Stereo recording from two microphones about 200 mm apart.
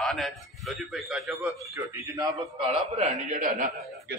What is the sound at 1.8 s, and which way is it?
Speech, 15° right (ahead or behind).